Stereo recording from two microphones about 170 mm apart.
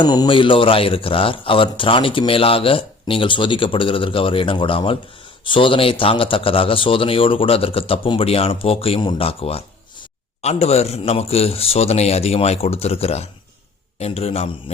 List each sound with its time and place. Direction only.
0.0 s a man's voice: 25° left (ahead or behind)